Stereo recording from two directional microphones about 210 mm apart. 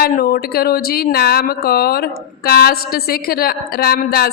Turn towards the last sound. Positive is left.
turn(degrees=45)  # may be behind; listen again after turning